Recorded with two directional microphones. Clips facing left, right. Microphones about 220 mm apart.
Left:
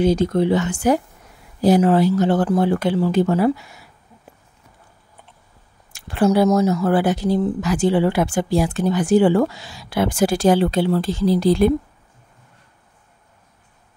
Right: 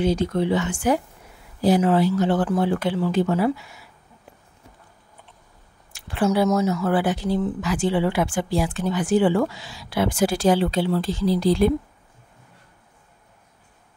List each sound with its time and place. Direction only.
0.0 s speech: 40° left (ahead or behind)
5.9 s speech: 45° left (ahead or behind)